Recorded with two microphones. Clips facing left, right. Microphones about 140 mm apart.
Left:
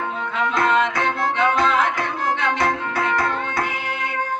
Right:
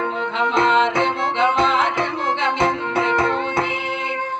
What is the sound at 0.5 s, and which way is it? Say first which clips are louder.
Music: right 3 dB; 25° right (ahead or behind).